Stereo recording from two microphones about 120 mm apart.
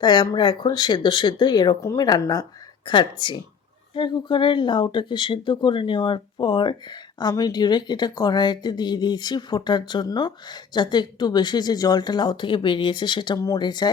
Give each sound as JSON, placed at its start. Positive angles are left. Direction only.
{"t": 0.0, "sound": "speech", "side_deg": 40}